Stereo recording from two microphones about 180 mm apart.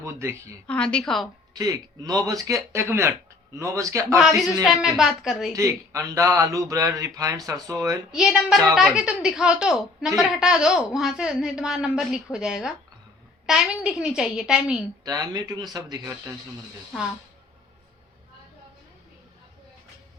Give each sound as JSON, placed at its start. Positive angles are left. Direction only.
{"t": 0.0, "sound": "speech", "side_deg": -15}
{"t": 0.7, "sound": "a woman's voice", "side_deg": 5}
{"t": 1.5, "sound": "speech", "side_deg": -20}
{"t": 4.6, "sound": "a woman's voice", "side_deg": 0}
{"t": 5.5, "sound": "speech", "side_deg": -15}
{"t": 8.1, "sound": "a woman's voice", "side_deg": -5}
{"t": 15.0, "sound": "speech", "side_deg": -20}